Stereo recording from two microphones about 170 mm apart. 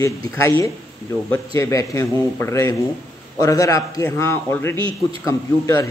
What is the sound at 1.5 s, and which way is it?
A man's voice, 20° left (ahead or behind).